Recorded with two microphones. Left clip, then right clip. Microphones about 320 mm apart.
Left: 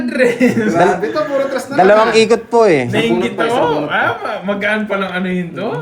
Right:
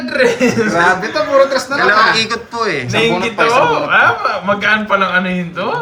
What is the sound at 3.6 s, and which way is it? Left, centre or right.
Speech, right.